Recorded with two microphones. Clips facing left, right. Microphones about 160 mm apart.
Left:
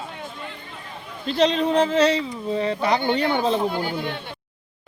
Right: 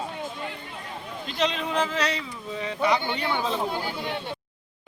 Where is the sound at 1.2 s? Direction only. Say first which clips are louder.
Left 8 dB; 35° left (ahead or behind).